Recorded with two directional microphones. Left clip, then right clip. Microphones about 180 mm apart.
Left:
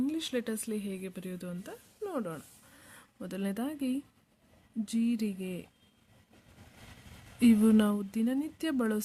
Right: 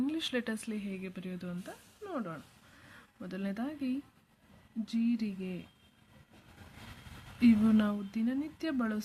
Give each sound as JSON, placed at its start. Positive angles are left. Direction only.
{"t": 0.0, "sound": "speech", "side_deg": 25}
{"t": 7.3, "sound": "speech", "side_deg": 50}